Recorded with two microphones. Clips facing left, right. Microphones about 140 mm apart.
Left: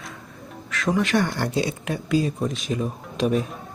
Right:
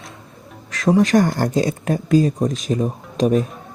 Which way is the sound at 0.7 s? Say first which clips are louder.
Right 7 dB; 35° right (ahead or behind).